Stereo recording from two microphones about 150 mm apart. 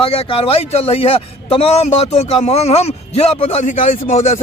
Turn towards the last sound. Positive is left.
turn(degrees=50)  # may be behind; listen again after turning